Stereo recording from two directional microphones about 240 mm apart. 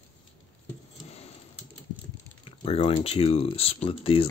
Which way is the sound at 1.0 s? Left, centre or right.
Left.